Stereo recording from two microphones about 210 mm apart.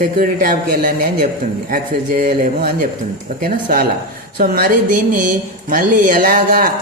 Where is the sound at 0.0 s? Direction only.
40° right (ahead or behind).